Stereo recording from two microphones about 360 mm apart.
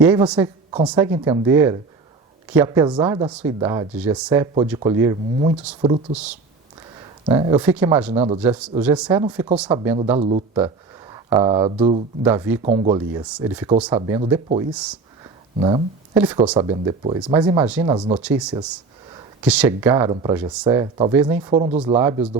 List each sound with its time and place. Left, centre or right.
0.0 s speech: centre
8.1 s speech: centre
8.4 s speech: centre
13.2 s speech: centre
18.2 s speech: centre